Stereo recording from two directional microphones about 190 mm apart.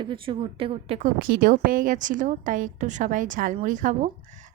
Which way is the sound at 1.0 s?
45° right (ahead or behind).